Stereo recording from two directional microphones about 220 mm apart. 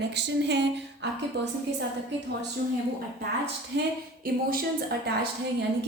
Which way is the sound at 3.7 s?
55° right (ahead or behind).